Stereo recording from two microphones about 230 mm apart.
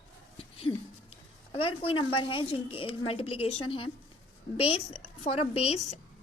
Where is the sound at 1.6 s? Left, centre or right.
Left.